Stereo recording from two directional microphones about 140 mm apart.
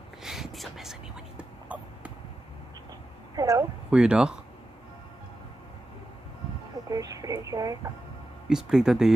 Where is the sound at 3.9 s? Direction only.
5° right (ahead or behind).